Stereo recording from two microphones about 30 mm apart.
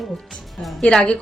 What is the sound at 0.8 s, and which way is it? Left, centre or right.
Speech, left.